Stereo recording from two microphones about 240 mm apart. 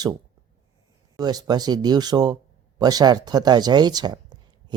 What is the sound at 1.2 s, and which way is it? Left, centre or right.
Speech, centre.